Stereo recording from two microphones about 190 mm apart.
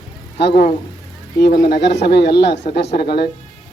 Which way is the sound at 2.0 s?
60° left (ahead or behind).